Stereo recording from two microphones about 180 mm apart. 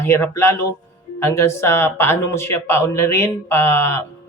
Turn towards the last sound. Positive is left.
turn(degrees=15)  # may be behind; listen again after turning